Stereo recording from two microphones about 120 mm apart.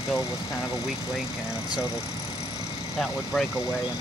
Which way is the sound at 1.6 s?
35° left (ahead or behind).